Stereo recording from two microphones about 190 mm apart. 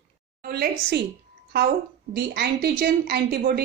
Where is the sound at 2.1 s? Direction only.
55° right (ahead or behind).